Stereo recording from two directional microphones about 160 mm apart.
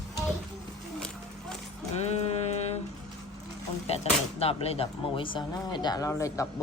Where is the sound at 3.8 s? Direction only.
40° left (ahead or behind).